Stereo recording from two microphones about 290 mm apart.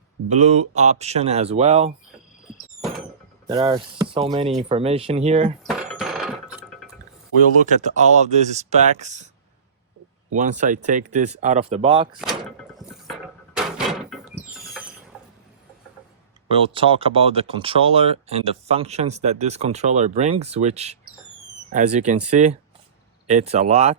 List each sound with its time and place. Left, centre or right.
0.3 s speech: right
3.4 s speech: centre
5.6 s a sound: centre
7.6 s speech: right
10.3 s speech: right
13.7 s door: centre
16.5 s speech: centre